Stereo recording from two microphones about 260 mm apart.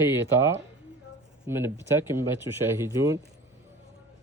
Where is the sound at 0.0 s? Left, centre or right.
Centre.